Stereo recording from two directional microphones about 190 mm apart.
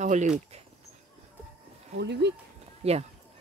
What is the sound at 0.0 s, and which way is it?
Speech, 40° right (ahead or behind).